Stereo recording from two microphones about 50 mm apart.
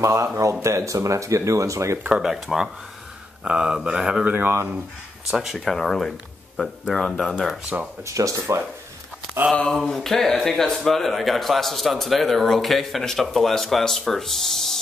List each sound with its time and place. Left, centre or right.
0.0 s speech: right
2.2 s mantra: centre
4.2 s speech: right
5.3 s speech: centre
5.7 s speech: centre
8.0 s speech: right
9.4 s speech: right
9.7 s speech: centre